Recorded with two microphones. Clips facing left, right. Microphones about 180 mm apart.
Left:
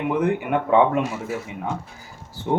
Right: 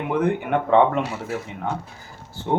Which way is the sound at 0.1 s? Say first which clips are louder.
Right 1 dB; centre (ahead or behind).